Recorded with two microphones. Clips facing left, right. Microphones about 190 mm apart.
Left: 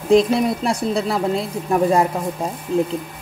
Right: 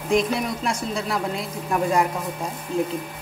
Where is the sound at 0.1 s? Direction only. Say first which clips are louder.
Left 7 dB; 30° left (ahead or behind).